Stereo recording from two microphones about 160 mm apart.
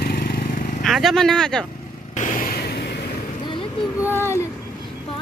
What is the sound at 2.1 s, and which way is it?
Vehicle, 50° left (ahead or behind).